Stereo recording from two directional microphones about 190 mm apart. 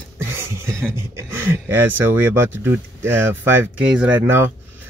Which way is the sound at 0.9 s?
10° right (ahead or behind).